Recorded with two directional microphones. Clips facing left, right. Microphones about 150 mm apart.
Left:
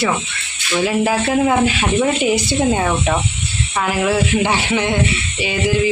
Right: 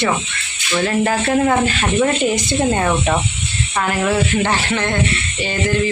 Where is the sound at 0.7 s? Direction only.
10° left (ahead or behind).